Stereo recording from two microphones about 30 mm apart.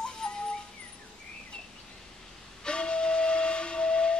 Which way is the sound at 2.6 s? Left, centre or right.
Left.